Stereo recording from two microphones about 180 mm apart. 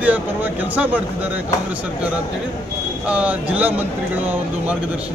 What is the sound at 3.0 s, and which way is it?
Speech, 5° right (ahead or behind).